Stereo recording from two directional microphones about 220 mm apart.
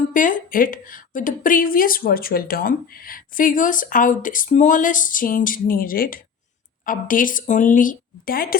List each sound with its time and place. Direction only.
0.1 s a woman's voice: 35° left (ahead or behind)